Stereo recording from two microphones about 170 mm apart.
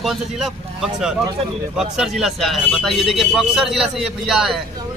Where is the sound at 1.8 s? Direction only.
Centre (ahead or behind).